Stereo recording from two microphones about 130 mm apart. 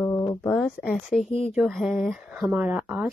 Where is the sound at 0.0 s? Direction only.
25° left (ahead or behind).